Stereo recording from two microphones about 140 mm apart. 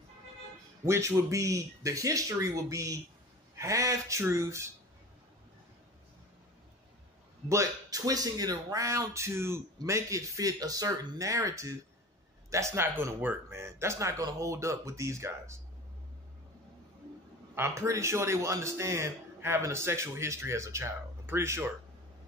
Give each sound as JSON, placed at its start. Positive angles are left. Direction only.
{"t": 0.8, "sound": "speech", "side_deg": -20}
{"t": 7.4, "sound": "speech", "side_deg": -25}
{"t": 17.6, "sound": "speech", "side_deg": -20}